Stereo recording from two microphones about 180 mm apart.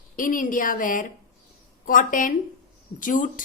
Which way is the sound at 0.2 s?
50° left (ahead or behind).